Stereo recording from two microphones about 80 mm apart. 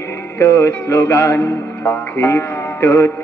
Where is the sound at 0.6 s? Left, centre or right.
Left.